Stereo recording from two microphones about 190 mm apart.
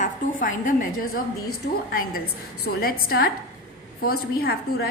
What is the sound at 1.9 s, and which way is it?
A woman's voice, 50° left (ahead or behind).